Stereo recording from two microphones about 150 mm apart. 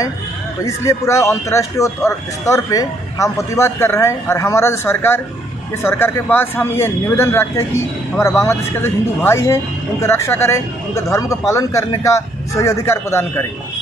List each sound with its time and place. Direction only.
0.7 s speech: 20° left (ahead or behind)